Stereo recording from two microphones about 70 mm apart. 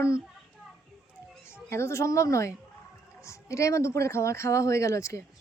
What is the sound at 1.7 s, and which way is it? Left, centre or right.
A woman's voice, left.